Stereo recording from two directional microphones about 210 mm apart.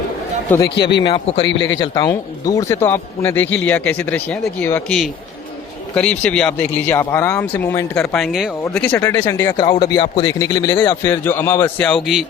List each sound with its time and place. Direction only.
0.8 s speech: 55° left (ahead or behind)
1.0 s a man's voice: 25° left (ahead or behind)
1.5 s speech: 60° left (ahead or behind)
1.8 s a man's voice: 20° left (ahead or behind)
8.1 s a man's voice: centre (ahead or behind)